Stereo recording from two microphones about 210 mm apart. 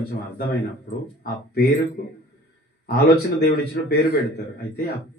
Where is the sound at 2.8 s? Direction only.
45° left (ahead or behind).